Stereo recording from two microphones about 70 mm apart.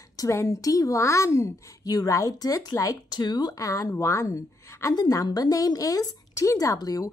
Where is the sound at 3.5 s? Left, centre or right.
Left.